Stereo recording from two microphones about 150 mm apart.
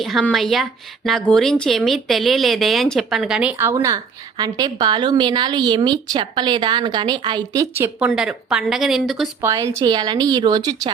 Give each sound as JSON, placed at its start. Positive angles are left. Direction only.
{"t": 0.0, "sound": "speech", "side_deg": 0}
{"t": 3.8, "sound": "a woman's voice", "side_deg": -25}
{"t": 7.9, "sound": "speech", "side_deg": -5}
{"t": 9.4, "sound": "a woman's voice", "side_deg": -20}